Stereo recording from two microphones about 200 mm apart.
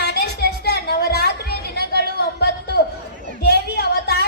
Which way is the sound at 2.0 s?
55° left (ahead or behind).